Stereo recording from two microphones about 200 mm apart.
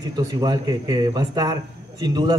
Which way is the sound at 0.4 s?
20° right (ahead or behind).